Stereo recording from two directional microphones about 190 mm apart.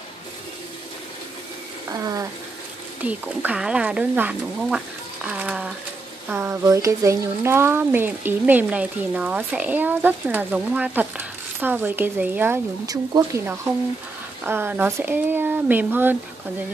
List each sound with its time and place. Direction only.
1.9 s speech: 20° right (ahead or behind)
3.0 s speech: 5° right (ahead or behind)